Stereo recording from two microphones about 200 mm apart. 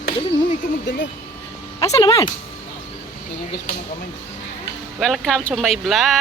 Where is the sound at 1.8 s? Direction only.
15° left (ahead or behind).